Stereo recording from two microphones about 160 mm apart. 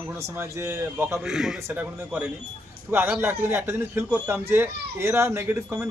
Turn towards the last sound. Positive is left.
turn(degrees=-15)  # may be behind; listen again after turning